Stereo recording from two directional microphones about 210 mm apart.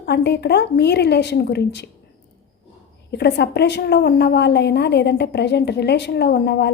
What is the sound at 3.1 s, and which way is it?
A woman's voice, 55° left (ahead or behind).